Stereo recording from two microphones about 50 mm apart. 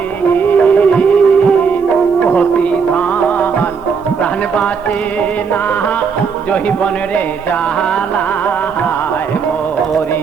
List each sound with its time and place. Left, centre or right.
0.3 s music: left